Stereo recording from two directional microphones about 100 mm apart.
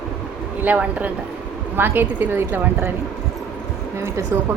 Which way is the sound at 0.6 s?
15° right (ahead or behind).